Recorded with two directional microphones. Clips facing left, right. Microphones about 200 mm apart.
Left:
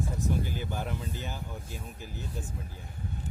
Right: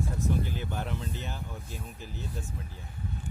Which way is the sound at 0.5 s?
5° left (ahead or behind).